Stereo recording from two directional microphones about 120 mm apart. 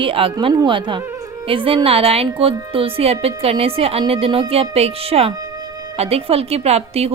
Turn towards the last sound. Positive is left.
turn(degrees=-60)  # may be behind; listen again after turning